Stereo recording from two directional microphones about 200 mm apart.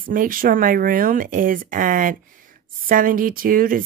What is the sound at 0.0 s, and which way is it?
Speech, 45° right (ahead or behind).